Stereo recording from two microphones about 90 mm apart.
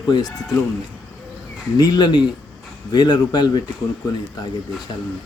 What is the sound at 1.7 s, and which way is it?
Speech, 50° left (ahead or behind).